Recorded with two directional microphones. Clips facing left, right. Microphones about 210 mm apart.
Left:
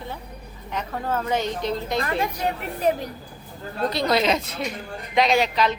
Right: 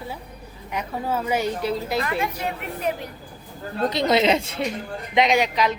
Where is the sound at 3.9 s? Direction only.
20° right (ahead or behind).